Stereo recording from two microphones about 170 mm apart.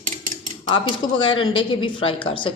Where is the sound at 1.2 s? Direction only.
30° left (ahead or behind).